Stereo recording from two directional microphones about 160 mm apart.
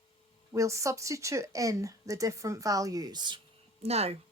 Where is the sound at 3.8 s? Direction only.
40° right (ahead or behind).